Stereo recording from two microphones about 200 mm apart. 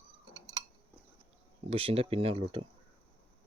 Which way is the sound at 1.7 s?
30° right (ahead or behind).